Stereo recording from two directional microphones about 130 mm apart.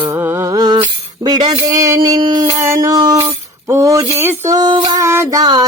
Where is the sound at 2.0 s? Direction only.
35° right (ahead or behind).